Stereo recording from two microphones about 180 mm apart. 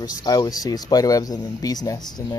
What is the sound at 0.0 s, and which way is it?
Speech, 25° left (ahead or behind).